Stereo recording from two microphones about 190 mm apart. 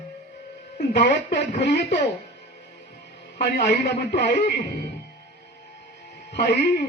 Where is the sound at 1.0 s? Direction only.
65° left (ahead or behind).